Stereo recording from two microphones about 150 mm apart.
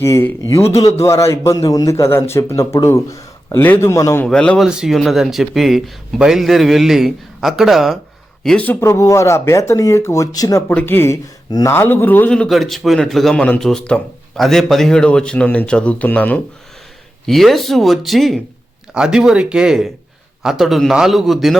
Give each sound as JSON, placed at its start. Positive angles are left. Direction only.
{"t": 0.0, "sound": "speech", "side_deg": 15}
{"t": 4.3, "sound": "speech", "side_deg": 5}
{"t": 8.4, "sound": "a man's voice", "side_deg": 10}